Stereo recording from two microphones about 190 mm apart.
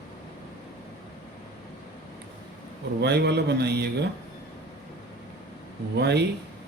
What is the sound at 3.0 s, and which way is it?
A man's voice, 60° right (ahead or behind).